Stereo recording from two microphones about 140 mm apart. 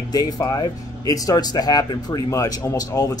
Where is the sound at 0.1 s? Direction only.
25° left (ahead or behind).